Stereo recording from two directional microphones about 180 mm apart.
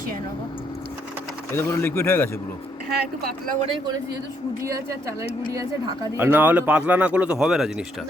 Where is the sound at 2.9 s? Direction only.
60° right (ahead or behind).